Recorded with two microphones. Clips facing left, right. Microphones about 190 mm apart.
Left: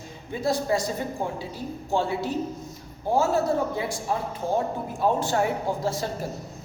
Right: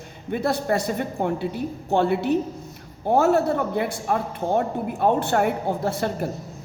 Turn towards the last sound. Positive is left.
turn(degrees=-60)  # may be behind; listen again after turning